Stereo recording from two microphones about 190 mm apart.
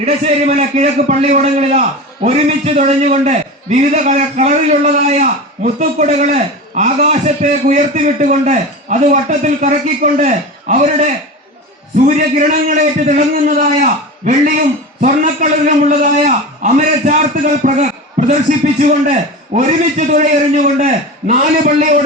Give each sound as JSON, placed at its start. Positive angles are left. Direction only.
{"t": 0.0, "sound": "a man's voice", "side_deg": -35}